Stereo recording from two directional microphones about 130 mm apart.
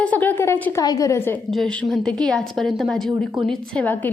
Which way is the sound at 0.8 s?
30° left (ahead or behind).